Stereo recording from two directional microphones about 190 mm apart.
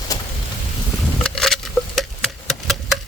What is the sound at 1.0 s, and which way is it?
Patter, 5° left (ahead or behind).